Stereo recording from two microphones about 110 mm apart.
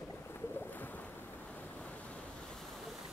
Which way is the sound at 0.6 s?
15° left (ahead or behind).